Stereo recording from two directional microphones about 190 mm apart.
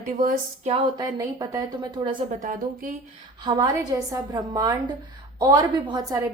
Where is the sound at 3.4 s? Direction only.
20° right (ahead or behind).